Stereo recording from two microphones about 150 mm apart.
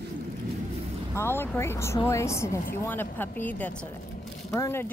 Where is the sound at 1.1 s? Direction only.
15° left (ahead or behind).